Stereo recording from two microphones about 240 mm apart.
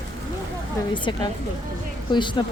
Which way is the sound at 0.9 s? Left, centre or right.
Centre.